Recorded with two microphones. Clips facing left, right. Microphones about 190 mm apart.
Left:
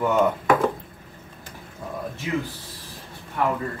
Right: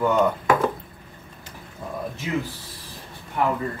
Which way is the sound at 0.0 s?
5° left (ahead or behind).